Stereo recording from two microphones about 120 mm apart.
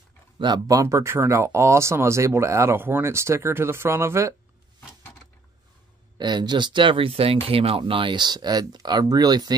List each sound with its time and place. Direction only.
0.4 s speech: 35° right (ahead or behind)
6.1 s speech: 40° right (ahead or behind)